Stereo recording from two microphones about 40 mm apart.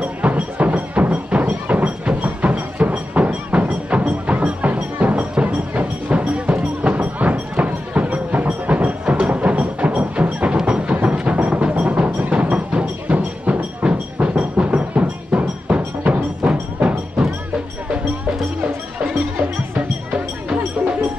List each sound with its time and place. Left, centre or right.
0.0 s music: right